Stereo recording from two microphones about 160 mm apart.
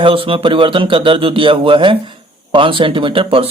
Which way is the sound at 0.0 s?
35° right (ahead or behind).